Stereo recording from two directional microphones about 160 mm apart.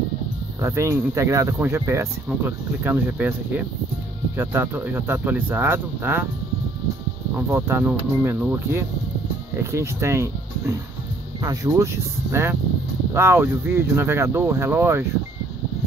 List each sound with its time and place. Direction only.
0.6 s speech: 20° right (ahead or behind)
7.3 s speech: 15° right (ahead or behind)
11.4 s speech: 20° right (ahead or behind)